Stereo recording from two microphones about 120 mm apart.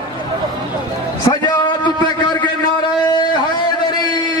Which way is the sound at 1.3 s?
40° left (ahead or behind).